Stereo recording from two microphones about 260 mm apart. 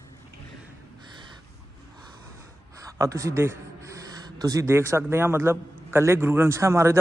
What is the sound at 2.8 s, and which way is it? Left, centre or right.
A man's voice, centre.